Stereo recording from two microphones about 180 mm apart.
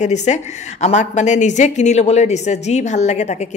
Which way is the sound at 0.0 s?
40° left (ahead or behind).